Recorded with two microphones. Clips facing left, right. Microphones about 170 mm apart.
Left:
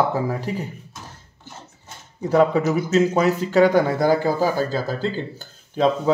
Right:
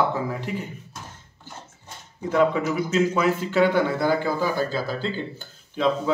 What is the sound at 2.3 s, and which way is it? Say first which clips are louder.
Speech: left 4 dB; 40° left (ahead or behind).